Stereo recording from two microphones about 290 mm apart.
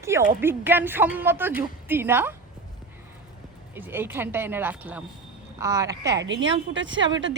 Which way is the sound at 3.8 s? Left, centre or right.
Centre.